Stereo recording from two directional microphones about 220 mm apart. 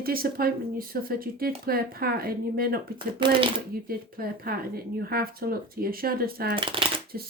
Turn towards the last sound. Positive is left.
turn(degrees=-20)  # may be behind; listen again after turning